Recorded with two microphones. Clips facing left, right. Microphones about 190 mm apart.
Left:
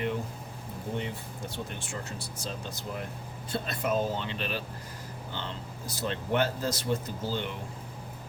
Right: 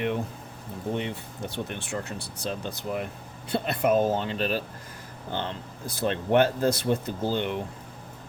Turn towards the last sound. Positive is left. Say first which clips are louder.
# right 6 dB
turn(degrees=-60)  # may be behind; listen again after turning